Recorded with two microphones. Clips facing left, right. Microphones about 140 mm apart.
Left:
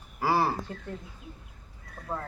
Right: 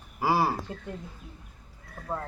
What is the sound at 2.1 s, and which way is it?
Speech, 10° right (ahead or behind).